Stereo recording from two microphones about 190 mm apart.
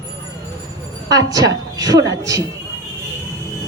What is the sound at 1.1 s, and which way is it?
Speech, 20° right (ahead or behind).